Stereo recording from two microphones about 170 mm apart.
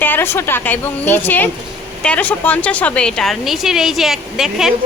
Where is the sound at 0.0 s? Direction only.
10° left (ahead or behind).